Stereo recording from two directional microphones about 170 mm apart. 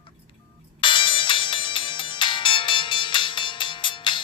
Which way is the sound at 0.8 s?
30° left (ahead or behind).